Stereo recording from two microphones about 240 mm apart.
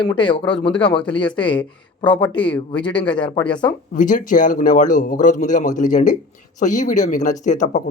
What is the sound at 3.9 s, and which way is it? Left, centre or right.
Speech, left.